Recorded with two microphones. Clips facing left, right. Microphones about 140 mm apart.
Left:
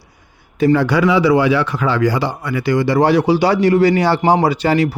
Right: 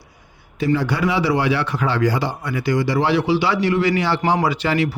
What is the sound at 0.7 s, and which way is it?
Speech, 90° left.